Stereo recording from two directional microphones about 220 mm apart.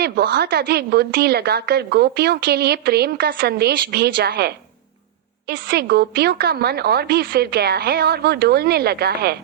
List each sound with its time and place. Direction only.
0.0 s a woman's voice: 45° right (ahead or behind)